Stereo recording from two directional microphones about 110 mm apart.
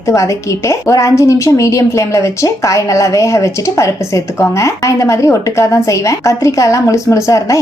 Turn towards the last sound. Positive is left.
turn(degrees=30)  # may be behind; listen again after turning